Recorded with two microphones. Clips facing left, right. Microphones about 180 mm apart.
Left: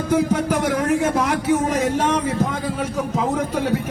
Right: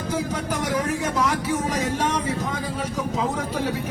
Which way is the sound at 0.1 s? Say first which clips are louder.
Left 8 dB; 55° left (ahead or behind).